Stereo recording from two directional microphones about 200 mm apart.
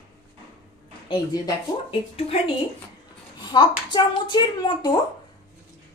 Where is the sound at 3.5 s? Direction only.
20° left (ahead or behind).